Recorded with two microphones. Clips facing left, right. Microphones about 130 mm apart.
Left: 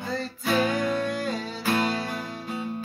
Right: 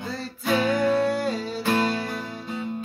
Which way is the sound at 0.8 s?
35° right (ahead or behind).